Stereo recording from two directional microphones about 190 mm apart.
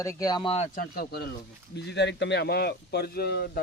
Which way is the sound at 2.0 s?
65° left (ahead or behind).